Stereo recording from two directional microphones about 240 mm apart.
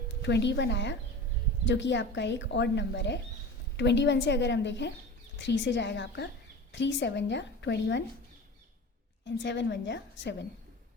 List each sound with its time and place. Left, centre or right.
0.2 s speech: left
9.2 s speech: left